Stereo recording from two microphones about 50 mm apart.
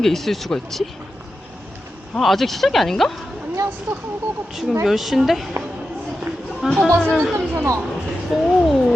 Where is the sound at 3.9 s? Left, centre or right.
Right.